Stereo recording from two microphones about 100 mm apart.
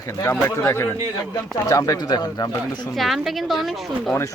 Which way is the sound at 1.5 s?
30° left (ahead or behind).